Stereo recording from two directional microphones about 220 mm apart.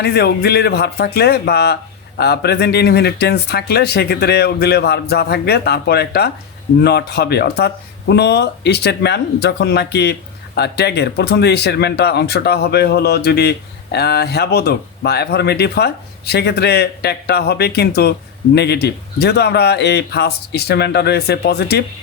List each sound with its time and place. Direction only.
0.0 s speech: 50° left (ahead or behind)